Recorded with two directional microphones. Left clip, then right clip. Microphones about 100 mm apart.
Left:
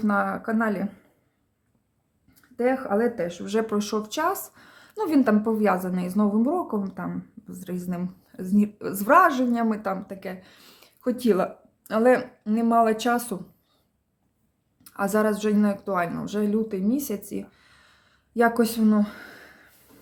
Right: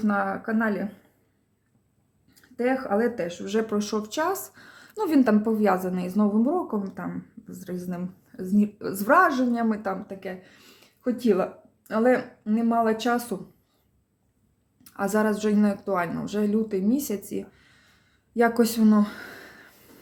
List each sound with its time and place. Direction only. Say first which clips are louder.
0.0 s speech: left 1 dB; 40° left (ahead or behind)
2.6 s speech: left 1 dB; 40° left (ahead or behind); by 13.4 s 25° left (ahead or behind)
14.8 s speech: left 1 dB; 20° left (ahead or behind); by 18.4 s 40° left (ahead or behind)
18.6 s speech: right 1 dB; centre (ahead or behind); by 19.6 s 30° right (ahead or behind)